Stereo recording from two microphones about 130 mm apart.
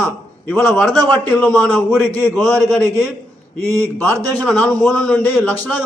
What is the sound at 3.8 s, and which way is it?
Speech, 25° right (ahead or behind).